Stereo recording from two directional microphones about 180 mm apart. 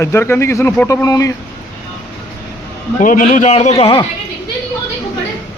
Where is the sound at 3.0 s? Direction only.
45° left (ahead or behind); by 4.0 s 30° left (ahead or behind).